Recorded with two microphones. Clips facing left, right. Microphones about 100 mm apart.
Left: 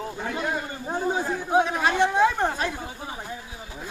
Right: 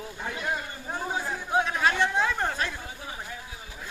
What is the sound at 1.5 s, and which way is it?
Chatter, 25° left (ahead or behind).